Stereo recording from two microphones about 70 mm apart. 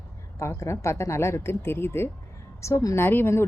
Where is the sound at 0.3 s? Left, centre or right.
Left.